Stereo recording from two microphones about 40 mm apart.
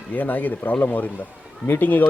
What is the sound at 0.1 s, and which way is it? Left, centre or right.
Speech, left.